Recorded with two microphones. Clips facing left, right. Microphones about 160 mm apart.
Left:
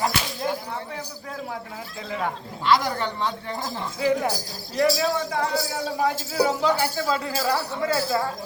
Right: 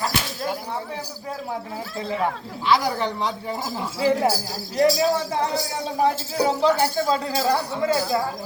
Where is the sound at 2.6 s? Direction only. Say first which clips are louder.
Right 1 dB; 5° right (ahead or behind).